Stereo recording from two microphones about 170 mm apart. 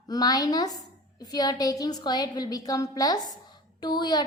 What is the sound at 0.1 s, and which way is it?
A woman's voice, 20° left (ahead or behind).